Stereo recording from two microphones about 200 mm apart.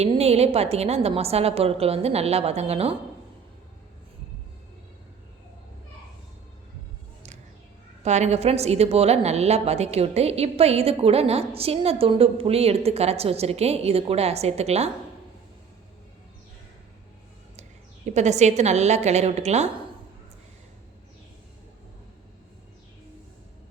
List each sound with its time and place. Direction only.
0.0 s a woman's voice: 30° right (ahead or behind)
8.0 s a woman's voice: 35° right (ahead or behind)
17.6 s a woman's voice: 35° right (ahead or behind)